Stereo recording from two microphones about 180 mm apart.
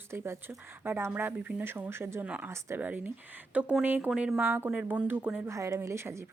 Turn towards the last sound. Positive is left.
turn(degrees=-15)  # may be behind; listen again after turning